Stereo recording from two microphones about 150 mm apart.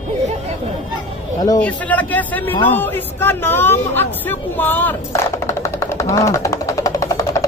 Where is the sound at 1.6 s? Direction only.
10° left (ahead or behind).